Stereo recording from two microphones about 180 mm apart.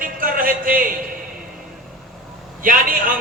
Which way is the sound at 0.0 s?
50° right (ahead or behind).